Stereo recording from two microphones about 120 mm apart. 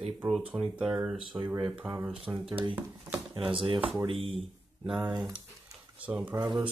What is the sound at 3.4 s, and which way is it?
Speech, 50° right (ahead or behind).